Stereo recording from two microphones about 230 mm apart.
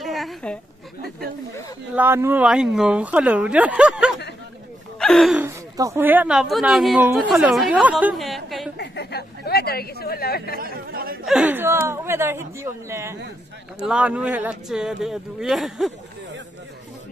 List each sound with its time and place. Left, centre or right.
0.0 s a sound: centre
2.0 s speech: centre
5.8 s speech: centre
8.7 s speech: left
10.6 s speech: right
11.2 s speech: centre